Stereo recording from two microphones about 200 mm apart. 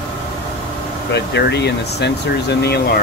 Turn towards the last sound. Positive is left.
turn(degrees=55)  # may be behind; listen again after turning